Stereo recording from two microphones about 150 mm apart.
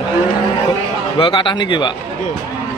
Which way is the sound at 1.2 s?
30° left (ahead or behind).